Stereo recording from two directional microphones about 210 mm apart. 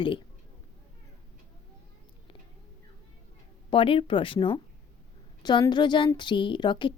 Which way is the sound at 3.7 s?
25° left (ahead or behind).